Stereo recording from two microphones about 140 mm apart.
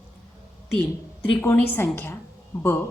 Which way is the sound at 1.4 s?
15° left (ahead or behind).